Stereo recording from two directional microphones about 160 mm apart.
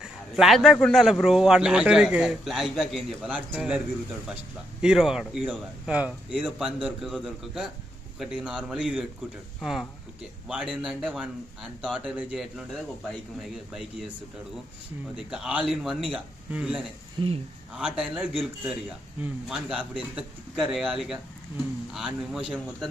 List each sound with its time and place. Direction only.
0.0 s a man's voice: centre (ahead or behind)
4.8 s a man's voice: 5° right (ahead or behind)
15.3 s a man's voice: 5° right (ahead or behind)
17.2 s speech: 30° right (ahead or behind)
17.7 s a man's voice: 5° right (ahead or behind)